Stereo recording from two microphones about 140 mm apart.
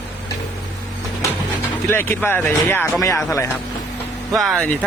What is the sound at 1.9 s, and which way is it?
A man's voice, 15° left (ahead or behind).